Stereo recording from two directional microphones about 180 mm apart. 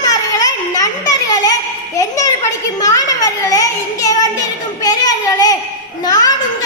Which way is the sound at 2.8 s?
20° left (ahead or behind).